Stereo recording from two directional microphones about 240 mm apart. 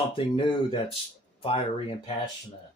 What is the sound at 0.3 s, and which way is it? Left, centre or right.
Speech, left.